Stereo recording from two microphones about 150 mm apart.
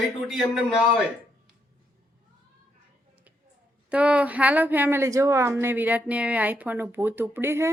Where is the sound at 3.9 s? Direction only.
10° right (ahead or behind).